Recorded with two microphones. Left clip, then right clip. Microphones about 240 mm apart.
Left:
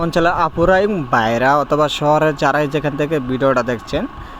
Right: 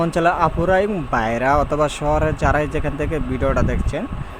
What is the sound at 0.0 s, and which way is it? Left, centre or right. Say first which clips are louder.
A man's voice: left 2 dB; centre.